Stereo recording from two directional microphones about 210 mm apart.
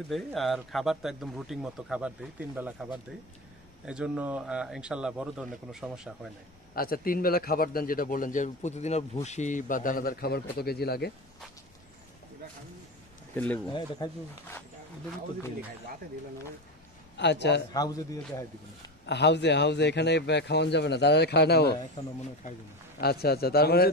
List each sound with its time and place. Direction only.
0.1 s a man's voice: centre (ahead or behind)
6.7 s a man's voice: 45° left (ahead or behind)
13.7 s speech: 20° left (ahead or behind)
17.2 s a man's voice: 55° left (ahead or behind)
17.7 s a man's voice: 15° left (ahead or behind)
19.0 s a man's voice: 55° left (ahead or behind)
22.0 s speech: 20° left (ahead or behind)
22.9 s a man's voice: 50° left (ahead or behind)